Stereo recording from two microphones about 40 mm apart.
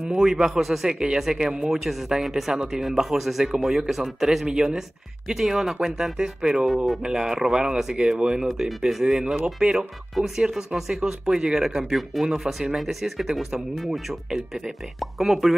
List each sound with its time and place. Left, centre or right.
0.2 s speech: centre
0.9 s speech: right; by 4.5 s centre
4.5 s speech: centre
10.1 s speech: centre